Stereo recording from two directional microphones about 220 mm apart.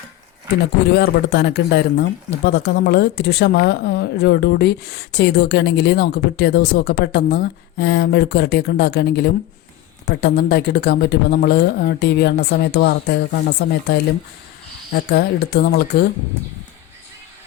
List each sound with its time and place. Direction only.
0.9 s speech: 50° left (ahead or behind)
14.9 s speech: 45° left (ahead or behind)